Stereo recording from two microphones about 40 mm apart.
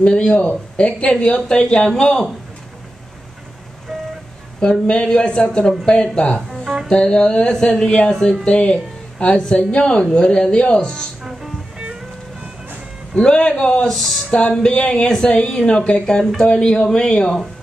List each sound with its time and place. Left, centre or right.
0.0 s speech: left
3.9 s vehicle: centre
4.6 s speech: left
13.1 s speech: left
13.8 s speech: centre
14.7 s a woman's voice: left
15.3 s speech: left